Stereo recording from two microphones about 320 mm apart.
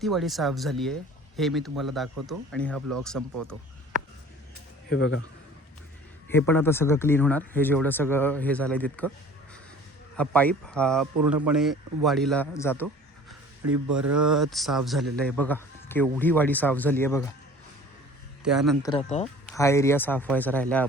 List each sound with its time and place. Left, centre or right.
0.0 s a man's voice: centre
4.9 s speech: left
6.2 s speech: centre
10.2 s a man's voice: centre
14.1 s a man's voice: centre
18.4 s a man's voice: centre
18.8 s speech: centre
19.5 s a man's voice: centre